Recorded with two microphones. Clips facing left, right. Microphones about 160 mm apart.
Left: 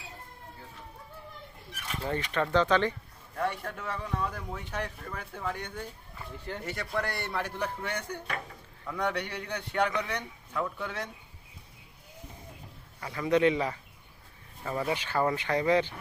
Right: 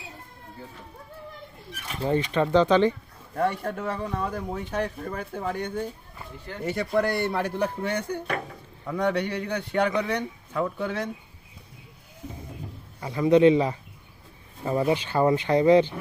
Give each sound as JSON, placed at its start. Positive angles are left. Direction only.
{"t": 2.0, "sound": "speech", "side_deg": -20}
{"t": 3.3, "sound": "speech", "side_deg": -35}
{"t": 13.0, "sound": "speech", "side_deg": -25}